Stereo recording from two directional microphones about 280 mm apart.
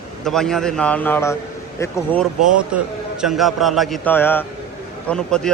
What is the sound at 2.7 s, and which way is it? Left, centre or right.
Speech, centre.